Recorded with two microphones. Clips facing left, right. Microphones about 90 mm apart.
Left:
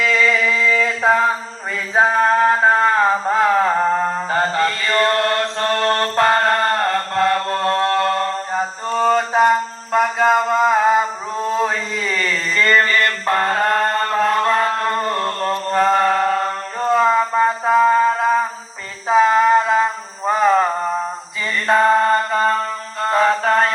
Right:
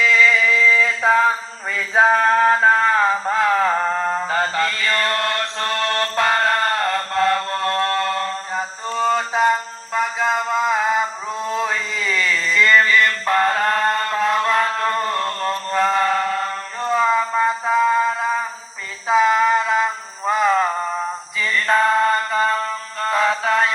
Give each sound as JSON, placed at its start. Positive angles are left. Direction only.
{"t": 0.2, "sound": "a sound", "side_deg": 35}
{"t": 2.1, "sound": "music", "side_deg": 15}
{"t": 2.6, "sound": "mantra", "side_deg": 25}
{"t": 8.9, "sound": "mantra", "side_deg": 50}
{"t": 9.9, "sound": "mantra", "side_deg": 55}
{"t": 11.4, "sound": "a sound", "side_deg": 30}
{"t": 13.2, "sound": "music", "side_deg": 25}
{"t": 14.1, "sound": "a sound", "side_deg": 45}
{"t": 14.4, "sound": "mantra", "side_deg": 30}
{"t": 19.0, "sound": "mantra", "side_deg": 35}
{"t": 21.7, "sound": "mantra", "side_deg": 30}